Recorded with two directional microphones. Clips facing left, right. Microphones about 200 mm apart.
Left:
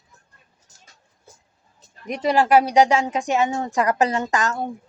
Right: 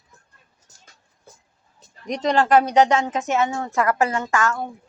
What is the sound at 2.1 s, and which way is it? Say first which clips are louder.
A woman's voice: even; 10° left (ahead or behind).